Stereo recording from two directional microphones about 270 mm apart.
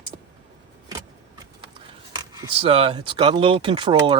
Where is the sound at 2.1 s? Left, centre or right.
Centre.